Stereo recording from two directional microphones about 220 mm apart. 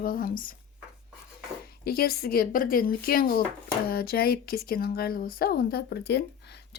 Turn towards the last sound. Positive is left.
turn(degrees=50)  # may be behind; listen again after turning